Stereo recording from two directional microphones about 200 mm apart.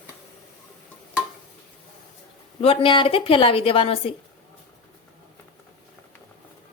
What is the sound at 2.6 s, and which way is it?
A woman's voice, 25° left (ahead or behind).